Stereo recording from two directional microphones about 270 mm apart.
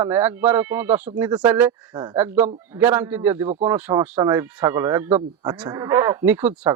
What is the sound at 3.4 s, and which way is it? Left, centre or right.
Speech, right.